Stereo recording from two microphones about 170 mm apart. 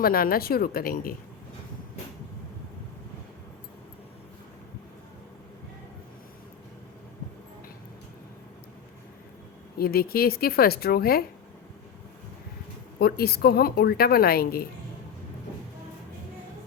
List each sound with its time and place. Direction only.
0.0 s speech: 60° left (ahead or behind)
9.7 s speech: 60° left (ahead or behind)
13.0 s speech: 65° left (ahead or behind)